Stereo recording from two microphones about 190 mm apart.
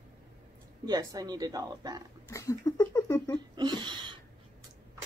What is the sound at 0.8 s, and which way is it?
Speech, 20° right (ahead or behind).